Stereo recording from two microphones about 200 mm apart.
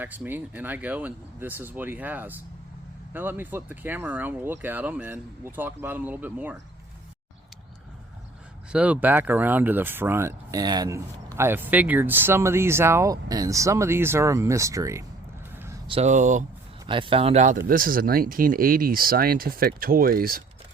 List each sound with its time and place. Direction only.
0.0 s speech: 10° right (ahead or behind)
8.7 s speech: 5° right (ahead or behind)
15.5 s vehicle: 10° right (ahead or behind)
15.9 s speech: 35° right (ahead or behind)
16.8 s speech: 25° right (ahead or behind); by 20.4 s 45° right (ahead or behind)